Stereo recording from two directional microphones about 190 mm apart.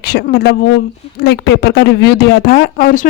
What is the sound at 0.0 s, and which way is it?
Speech, 60° left (ahead or behind).